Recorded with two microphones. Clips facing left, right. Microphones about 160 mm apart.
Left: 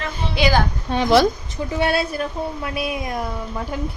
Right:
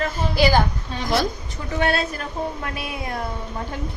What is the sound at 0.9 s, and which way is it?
Speech, 80° left.